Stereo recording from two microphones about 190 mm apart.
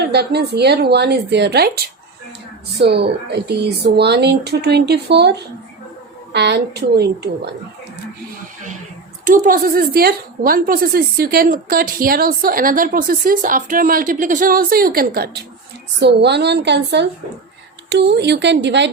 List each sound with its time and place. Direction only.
0.0 s speech: 60° right (ahead or behind)
9.2 s a woman's voice: 45° right (ahead or behind)
16.0 s speech: 60° right (ahead or behind)